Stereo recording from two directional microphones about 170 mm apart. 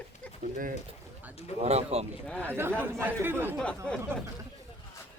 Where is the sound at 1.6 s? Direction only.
40° right (ahead or behind).